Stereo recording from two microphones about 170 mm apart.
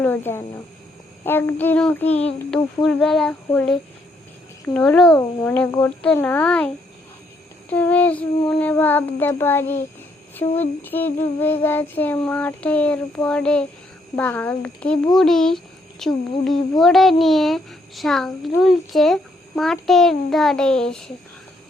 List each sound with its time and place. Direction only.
0.0 s child singing: 10° left (ahead or behind)
2.5 s a child's voice: centre (ahead or behind)
4.6 s child singing: 10° left (ahead or behind)
5.1 s child singing: 15° left (ahead or behind)
7.7 s child singing: 10° left (ahead or behind)
15.1 s a child's voice: 5° left (ahead or behind)